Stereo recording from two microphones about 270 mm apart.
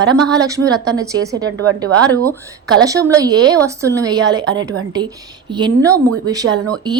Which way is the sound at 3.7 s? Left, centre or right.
Centre.